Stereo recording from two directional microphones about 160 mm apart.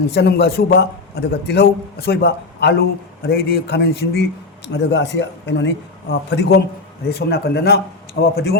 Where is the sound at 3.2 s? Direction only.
75° left (ahead or behind).